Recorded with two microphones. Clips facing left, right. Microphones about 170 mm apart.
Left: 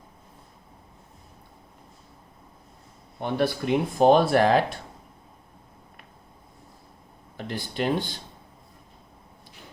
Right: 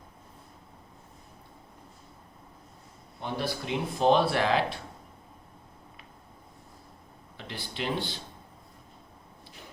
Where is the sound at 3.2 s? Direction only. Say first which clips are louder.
Left 7 dB; 55° left (ahead or behind).